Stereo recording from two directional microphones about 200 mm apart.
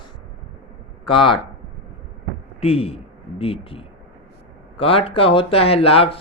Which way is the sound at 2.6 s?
30° left (ahead or behind).